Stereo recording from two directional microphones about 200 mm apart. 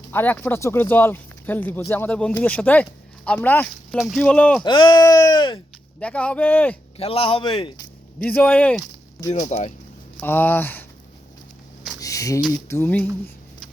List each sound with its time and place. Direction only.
0.1 s speech: 10° left (ahead or behind)
4.6 s speech: 25° left (ahead or behind)
6.0 s speech: 5° left (ahead or behind)
6.9 s speech: 30° left (ahead or behind)
8.2 s speech: 10° left (ahead or behind)
9.3 s speech: 35° left (ahead or behind)
10.2 s speech: 10° left (ahead or behind)
11.9 s a sound: 15° left (ahead or behind)
12.5 s speech: 15° left (ahead or behind)